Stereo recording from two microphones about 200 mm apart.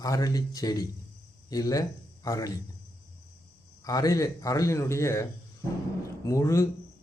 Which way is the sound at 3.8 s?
15° left (ahead or behind).